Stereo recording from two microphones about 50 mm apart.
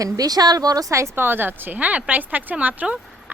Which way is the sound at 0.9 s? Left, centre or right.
Right.